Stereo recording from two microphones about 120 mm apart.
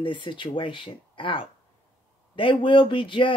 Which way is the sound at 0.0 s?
40° left (ahead or behind).